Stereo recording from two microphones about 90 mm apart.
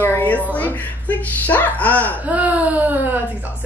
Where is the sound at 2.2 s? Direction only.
15° right (ahead or behind).